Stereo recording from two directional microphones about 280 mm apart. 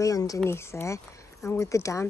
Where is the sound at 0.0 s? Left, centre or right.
Centre.